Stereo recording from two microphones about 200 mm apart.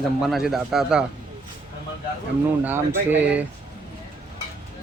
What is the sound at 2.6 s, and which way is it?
Speech, 10° right (ahead or behind).